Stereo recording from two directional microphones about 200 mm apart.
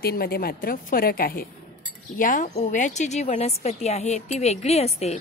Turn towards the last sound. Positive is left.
turn(degrees=30)  # may be behind; listen again after turning